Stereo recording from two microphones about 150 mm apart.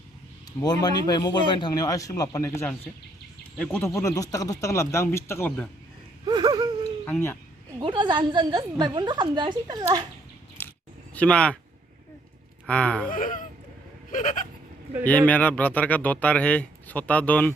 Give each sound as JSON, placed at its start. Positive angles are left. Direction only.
{"t": 0.6, "sound": "a man's voice", "side_deg": 25}
{"t": 3.8, "sound": "a man's voice", "side_deg": 20}
{"t": 6.2, "sound": "wheeze", "side_deg": -30}
{"t": 7.0, "sound": "speech", "side_deg": 15}
{"t": 7.8, "sound": "a woman's voice", "side_deg": -30}
{"t": 10.6, "sound": "a sound", "side_deg": 15}
{"t": 11.1, "sound": "speech", "side_deg": 10}
{"t": 12.6, "sound": "speech", "side_deg": 10}
{"t": 13.1, "sound": "speech", "side_deg": 65}
{"t": 15.3, "sound": "speech", "side_deg": 10}